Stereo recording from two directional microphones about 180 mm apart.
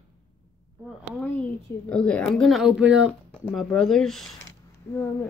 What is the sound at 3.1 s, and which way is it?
Speech, 5° left (ahead or behind).